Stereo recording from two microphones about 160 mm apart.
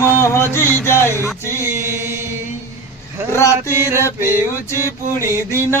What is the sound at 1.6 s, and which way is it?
Mantra, 15° right (ahead or behind).